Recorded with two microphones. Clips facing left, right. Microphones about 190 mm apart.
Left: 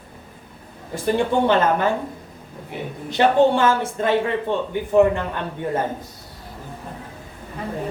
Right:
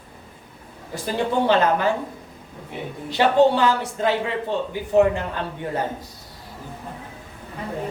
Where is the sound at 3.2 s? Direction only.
50° left (ahead or behind).